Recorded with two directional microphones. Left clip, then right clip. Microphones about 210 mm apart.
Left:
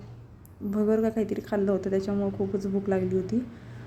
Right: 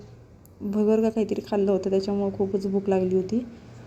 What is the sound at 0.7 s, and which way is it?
A woman's voice, 10° right (ahead or behind).